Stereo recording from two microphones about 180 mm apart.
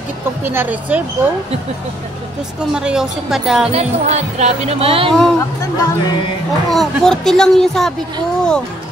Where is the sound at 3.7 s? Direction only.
35° right (ahead or behind).